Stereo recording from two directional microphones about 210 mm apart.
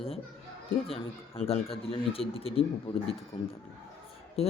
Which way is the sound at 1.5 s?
25° left (ahead or behind).